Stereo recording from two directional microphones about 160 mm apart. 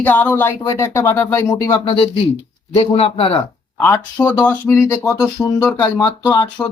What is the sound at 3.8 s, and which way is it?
Speech, 15° left (ahead or behind).